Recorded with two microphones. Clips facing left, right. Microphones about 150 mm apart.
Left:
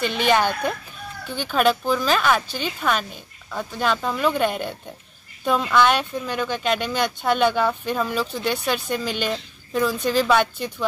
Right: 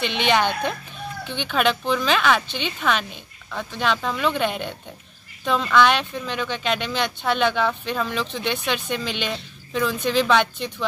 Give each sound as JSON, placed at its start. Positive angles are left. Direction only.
{"t": 0.0, "sound": "speech", "side_deg": 45}
{"t": 1.5, "sound": "speech", "side_deg": 5}